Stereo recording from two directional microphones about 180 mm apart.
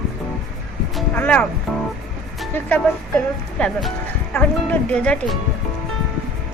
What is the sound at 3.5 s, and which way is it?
Speech, 5° left (ahead or behind).